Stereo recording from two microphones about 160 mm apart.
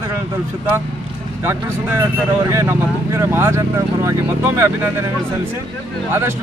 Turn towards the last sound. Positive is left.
turn(degrees=-15)  # may be behind; listen again after turning